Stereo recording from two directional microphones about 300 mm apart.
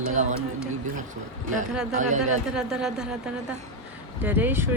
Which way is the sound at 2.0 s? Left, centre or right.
Right.